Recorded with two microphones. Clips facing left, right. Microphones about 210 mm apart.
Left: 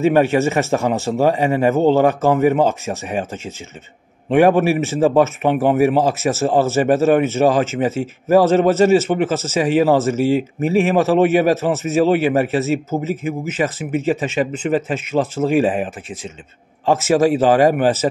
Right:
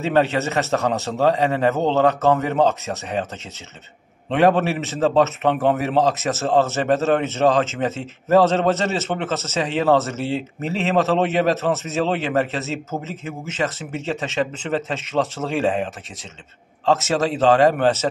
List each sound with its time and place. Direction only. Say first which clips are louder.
0.0 s a man's voice: left 5 dB; 15° left (ahead or behind)